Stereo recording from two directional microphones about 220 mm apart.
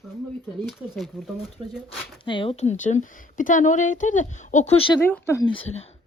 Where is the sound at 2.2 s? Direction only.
20° left (ahead or behind).